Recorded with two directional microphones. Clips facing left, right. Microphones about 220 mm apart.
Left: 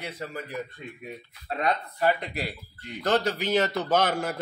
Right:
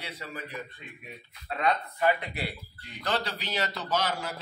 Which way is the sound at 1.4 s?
40° left (ahead or behind).